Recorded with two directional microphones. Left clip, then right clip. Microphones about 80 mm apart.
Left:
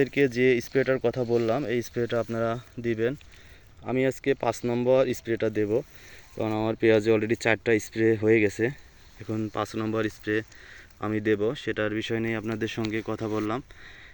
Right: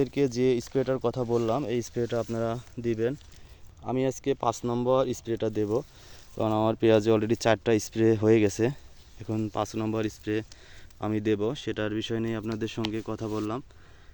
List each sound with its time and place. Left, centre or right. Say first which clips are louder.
0.0 s speech: left 3 dB; centre
6.3 s speech: right 2 dB; right
7.9 s speech: even; right
9.5 s speech: left 1 dB; right
11.0 s speech: left 2 dB; right
11.9 s speech: left 2 dB; centre
12.4 s speech: left 2 dB; centre
13.1 s speech: left 3 dB; centre